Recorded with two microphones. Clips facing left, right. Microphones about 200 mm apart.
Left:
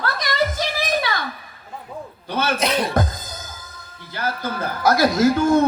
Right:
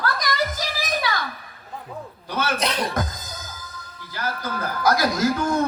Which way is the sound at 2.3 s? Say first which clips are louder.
Left 3 dB; 30° left (ahead or behind).